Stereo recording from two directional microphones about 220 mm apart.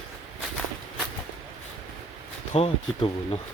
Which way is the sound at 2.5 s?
25° left (ahead or behind).